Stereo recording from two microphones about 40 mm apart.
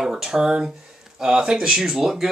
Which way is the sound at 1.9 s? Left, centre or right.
Centre.